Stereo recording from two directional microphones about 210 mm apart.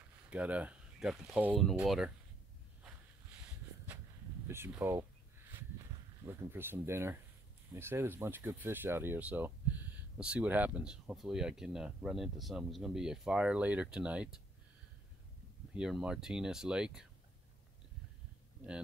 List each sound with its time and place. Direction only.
0.3 s speech: 5° right (ahead or behind)
3.3 s a sound: 10° right (ahead or behind)
4.5 s speech: 10° right (ahead or behind)
6.2 s speech: 10° right (ahead or behind)
15.7 s speech: 5° right (ahead or behind)